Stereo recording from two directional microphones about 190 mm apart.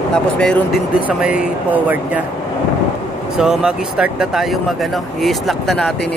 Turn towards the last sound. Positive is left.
turn(degrees=0)  # may be behind; listen again after turning